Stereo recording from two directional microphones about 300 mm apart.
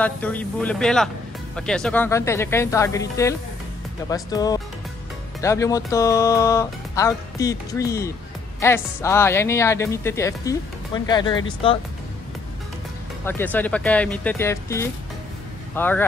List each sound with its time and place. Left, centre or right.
0.0 s speech: centre
13.2 s speech: centre